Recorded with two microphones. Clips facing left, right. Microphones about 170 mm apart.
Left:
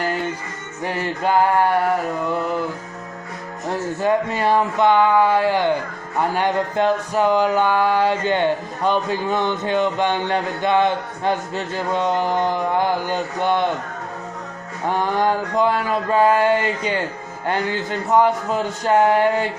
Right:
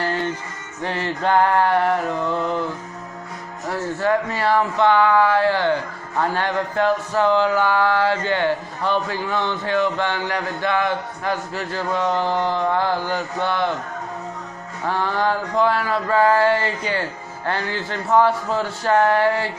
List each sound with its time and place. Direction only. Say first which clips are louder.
0.8 s speech: even; 10° left (ahead or behind)
3.6 s speech: left 1 dB; 20° left (ahead or behind)
14.9 s speech: left 2 dB; 15° left (ahead or behind)